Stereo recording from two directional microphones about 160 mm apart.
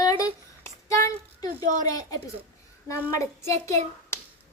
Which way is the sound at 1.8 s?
25° left (ahead or behind).